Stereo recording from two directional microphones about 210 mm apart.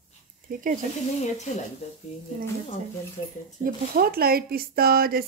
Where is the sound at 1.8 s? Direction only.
30° left (ahead or behind).